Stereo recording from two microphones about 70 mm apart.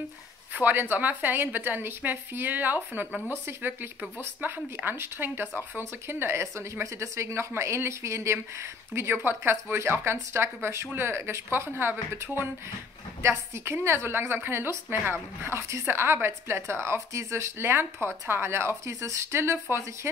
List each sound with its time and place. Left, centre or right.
0.5 s a woman's voice: right
13.3 s speech: right